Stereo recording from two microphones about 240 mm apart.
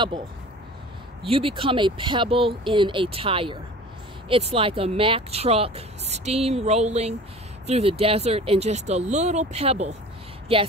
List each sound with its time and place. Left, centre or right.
1.3 s speech: right